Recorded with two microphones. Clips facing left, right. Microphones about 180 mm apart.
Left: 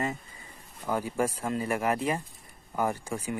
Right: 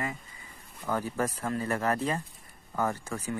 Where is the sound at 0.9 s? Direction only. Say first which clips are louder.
Left 2 dB; 10° left (ahead or behind).